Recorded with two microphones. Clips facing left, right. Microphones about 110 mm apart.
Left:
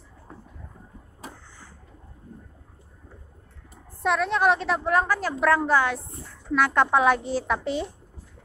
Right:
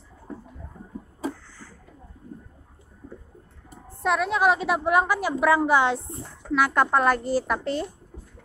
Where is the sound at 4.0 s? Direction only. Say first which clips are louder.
Even; 5° right (ahead or behind); by 6.0 s 20° right (ahead or behind).